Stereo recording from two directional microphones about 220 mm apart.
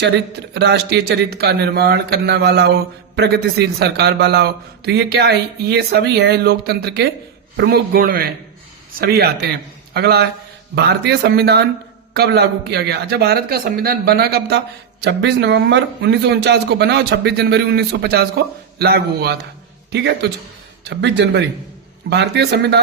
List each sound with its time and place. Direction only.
0.5 s a man's voice: 50° right (ahead or behind)